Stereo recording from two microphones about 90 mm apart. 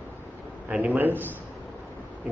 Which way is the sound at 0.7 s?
15° right (ahead or behind).